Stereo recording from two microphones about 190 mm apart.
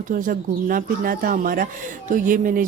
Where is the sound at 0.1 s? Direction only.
45° right (ahead or behind).